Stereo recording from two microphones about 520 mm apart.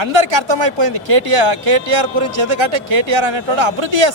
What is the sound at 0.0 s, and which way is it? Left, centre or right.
Speech, right.